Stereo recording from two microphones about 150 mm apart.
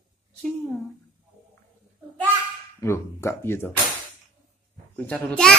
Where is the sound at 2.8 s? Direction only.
20° left (ahead or behind).